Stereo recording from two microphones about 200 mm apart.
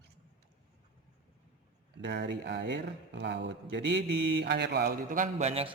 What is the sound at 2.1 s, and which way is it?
A man's voice, 60° right (ahead or behind).